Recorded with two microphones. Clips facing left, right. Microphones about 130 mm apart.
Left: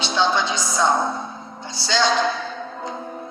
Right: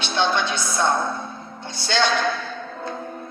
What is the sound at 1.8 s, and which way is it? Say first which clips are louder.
Speech: left 1 dB; 60° right (ahead or behind).